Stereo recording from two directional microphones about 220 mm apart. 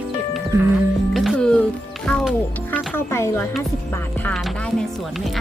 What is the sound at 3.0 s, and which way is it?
Speech, 10° left (ahead or behind).